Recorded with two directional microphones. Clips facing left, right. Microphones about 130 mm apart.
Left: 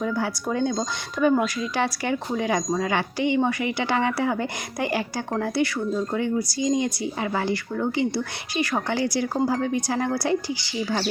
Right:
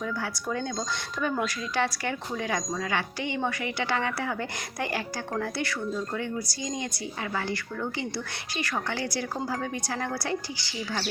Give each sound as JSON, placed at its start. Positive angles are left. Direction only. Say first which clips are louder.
{"t": 0.0, "sound": "speech", "louder": "left 6 dB", "side_deg": 20}